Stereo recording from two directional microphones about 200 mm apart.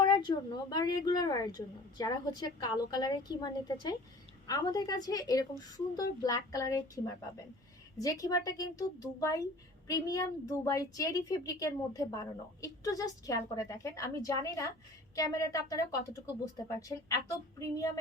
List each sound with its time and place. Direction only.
0.0 s a woman's voice: 20° left (ahead or behind)